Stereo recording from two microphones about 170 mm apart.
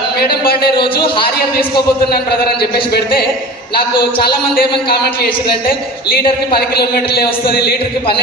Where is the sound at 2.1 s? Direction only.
65° left (ahead or behind).